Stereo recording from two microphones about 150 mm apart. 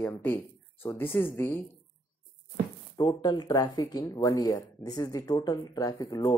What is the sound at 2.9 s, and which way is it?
Speech, 30° left (ahead or behind).